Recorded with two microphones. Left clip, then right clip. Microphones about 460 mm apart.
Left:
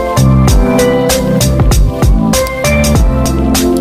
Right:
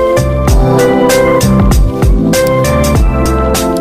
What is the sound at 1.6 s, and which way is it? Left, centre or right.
Music, centre.